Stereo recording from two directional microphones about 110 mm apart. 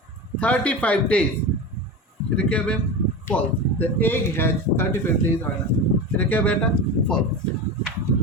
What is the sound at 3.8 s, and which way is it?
Speech, 15° left (ahead or behind).